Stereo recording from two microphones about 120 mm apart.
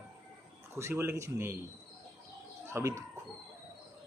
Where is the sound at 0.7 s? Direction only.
20° right (ahead or behind).